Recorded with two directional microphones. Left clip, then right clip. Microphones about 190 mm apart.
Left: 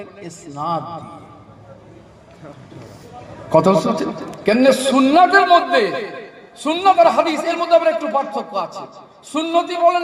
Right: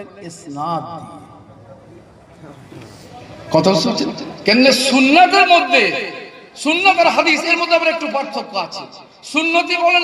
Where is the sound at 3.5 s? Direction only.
25° right (ahead or behind).